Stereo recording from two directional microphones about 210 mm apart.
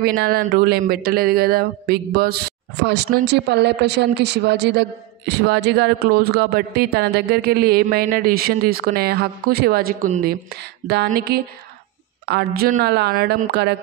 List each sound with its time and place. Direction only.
0.0 s speech: 45° right (ahead or behind)